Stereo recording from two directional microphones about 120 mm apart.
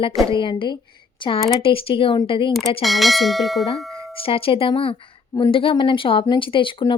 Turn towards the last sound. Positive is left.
turn(degrees=45)  # may be behind; listen again after turning